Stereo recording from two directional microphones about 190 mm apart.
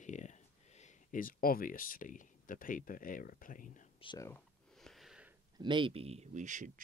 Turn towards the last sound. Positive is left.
turn(degrees=-40)  # may be behind; listen again after turning